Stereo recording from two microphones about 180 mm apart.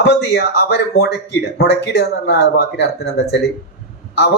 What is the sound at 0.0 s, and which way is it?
Speech, 70° left (ahead or behind).